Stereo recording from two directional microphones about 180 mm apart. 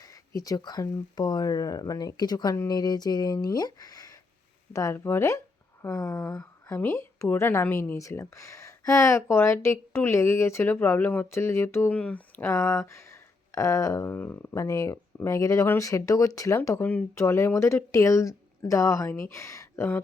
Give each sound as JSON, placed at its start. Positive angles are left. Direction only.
{"t": 0.3, "sound": "a woman's voice", "side_deg": 20}